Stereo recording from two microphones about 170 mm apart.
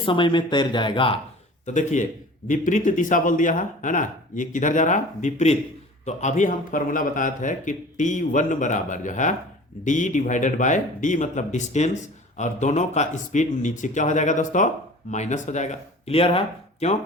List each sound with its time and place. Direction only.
0.0 s speech: 30° left (ahead or behind)
1.6 s speech: 45° left (ahead or behind)